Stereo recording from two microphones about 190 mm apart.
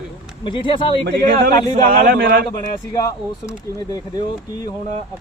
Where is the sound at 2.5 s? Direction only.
20° left (ahead or behind).